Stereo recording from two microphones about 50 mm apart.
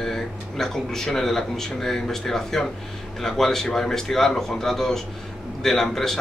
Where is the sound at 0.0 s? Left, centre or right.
Centre.